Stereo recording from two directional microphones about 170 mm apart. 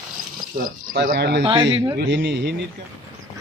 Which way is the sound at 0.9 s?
75° right (ahead or behind).